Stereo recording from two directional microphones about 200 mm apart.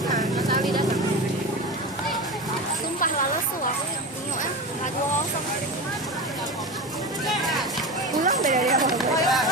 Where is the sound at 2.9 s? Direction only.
40° left (ahead or behind).